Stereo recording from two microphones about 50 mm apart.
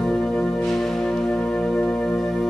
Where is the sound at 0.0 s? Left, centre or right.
Centre.